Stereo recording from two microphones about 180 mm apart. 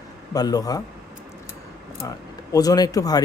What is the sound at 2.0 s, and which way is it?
Speech, 20° left (ahead or behind).